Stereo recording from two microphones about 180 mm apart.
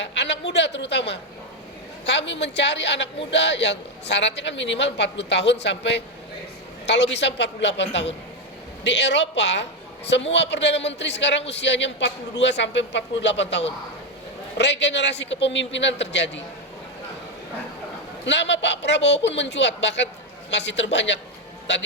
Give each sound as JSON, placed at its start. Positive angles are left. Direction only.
{"t": 0.0, "sound": "a man's voice", "side_deg": 75}
{"t": 18.3, "sound": "a man's voice", "side_deg": 75}